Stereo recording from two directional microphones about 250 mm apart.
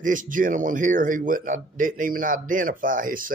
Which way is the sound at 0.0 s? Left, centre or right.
Right.